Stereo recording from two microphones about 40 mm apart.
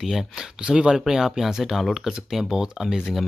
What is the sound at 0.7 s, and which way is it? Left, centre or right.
Speech, right.